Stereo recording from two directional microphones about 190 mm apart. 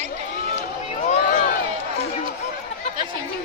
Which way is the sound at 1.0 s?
45° left (ahead or behind).